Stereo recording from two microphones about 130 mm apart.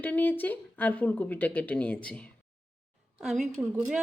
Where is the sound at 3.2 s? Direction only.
5° right (ahead or behind).